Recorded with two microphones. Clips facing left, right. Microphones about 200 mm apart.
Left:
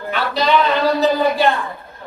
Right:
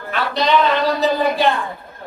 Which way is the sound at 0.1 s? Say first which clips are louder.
Left 1 dB; 5° left (ahead or behind).